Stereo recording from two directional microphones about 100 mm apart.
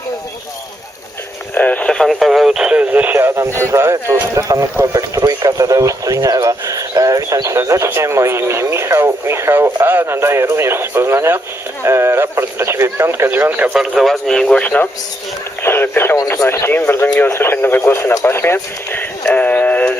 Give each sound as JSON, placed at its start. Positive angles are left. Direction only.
{"t": 1.5, "sound": "speech", "side_deg": 15}
{"t": 13.7, "sound": "speech", "side_deg": 0}
{"t": 19.2, "sound": "synthetic singing", "side_deg": 15}